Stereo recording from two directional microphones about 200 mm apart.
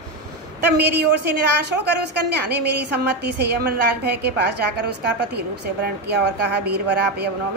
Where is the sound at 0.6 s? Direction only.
55° right (ahead or behind).